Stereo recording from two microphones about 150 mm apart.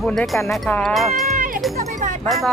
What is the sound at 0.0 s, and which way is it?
Speech, 5° left (ahead or behind).